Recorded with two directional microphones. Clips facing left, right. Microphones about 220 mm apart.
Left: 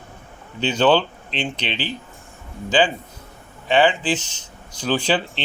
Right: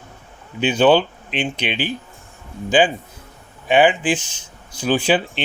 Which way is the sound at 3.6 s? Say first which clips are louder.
Right 2 dB; 15° right (ahead or behind).